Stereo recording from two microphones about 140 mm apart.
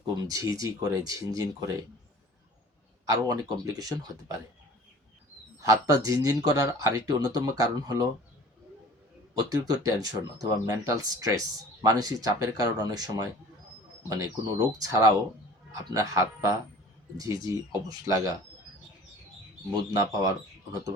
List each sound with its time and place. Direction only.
0.2 s speech: 25° right (ahead or behind)
3.1 s speech: 25° right (ahead or behind)
5.5 s speech: 25° right (ahead or behind)
9.3 s speech: 25° right (ahead or behind)
19.7 s speech: 25° right (ahead or behind)